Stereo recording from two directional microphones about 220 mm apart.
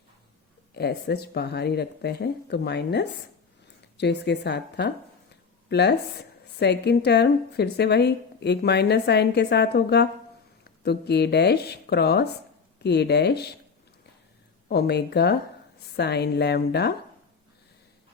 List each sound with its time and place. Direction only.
0.7 s speech: 50° left (ahead or behind)
14.7 s speech: 45° left (ahead or behind)